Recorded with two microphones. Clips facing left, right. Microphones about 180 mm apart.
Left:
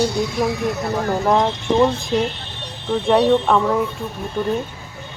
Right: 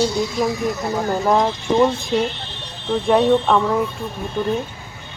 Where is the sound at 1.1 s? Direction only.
Centre (ahead or behind).